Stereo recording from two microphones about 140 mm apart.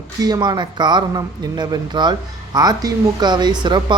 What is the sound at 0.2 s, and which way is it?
A man's voice, 30° right (ahead or behind).